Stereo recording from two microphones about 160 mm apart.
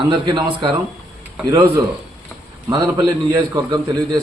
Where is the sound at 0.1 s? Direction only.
30° right (ahead or behind).